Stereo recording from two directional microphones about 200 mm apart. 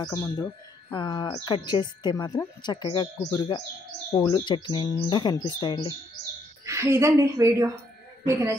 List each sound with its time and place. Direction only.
0.0 s a woman's voice: 15° left (ahead or behind)
6.6 s a woman's voice: 15° right (ahead or behind)